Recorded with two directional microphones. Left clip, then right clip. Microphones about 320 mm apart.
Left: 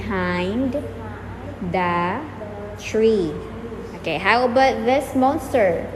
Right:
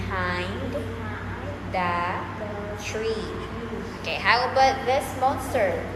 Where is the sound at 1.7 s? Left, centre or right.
Left.